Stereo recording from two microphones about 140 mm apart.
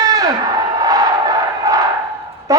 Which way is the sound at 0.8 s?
30° right (ahead or behind).